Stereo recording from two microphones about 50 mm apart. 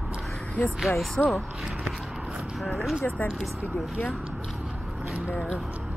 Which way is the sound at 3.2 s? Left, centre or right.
Left.